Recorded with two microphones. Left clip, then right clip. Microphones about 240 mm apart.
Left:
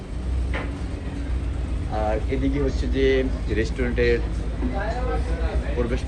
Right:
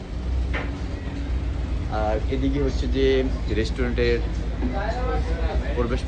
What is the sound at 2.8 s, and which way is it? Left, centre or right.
Speech, centre.